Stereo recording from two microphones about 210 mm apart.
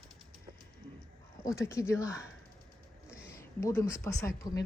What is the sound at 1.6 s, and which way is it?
A woman's voice, 15° left (ahead or behind).